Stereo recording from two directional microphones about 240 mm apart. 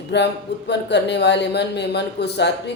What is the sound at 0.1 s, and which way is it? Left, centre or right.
Speech, left.